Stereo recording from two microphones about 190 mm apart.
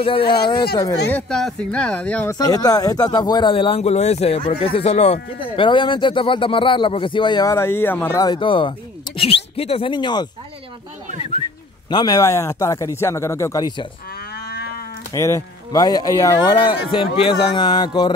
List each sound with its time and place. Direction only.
0.0 s speech: 30° left (ahead or behind)
1.1 s speech: 5° left (ahead or behind)
2.3 s speech: 20° left (ahead or behind)
11.9 s speech: 20° left (ahead or behind)
14.1 s livestock: 55° left (ahead or behind)
15.1 s speech: 15° left (ahead or behind)